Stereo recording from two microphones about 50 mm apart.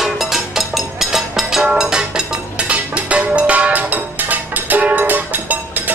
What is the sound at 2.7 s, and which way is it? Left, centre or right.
Music, right.